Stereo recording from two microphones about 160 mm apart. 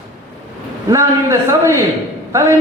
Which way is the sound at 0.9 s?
15° right (ahead or behind).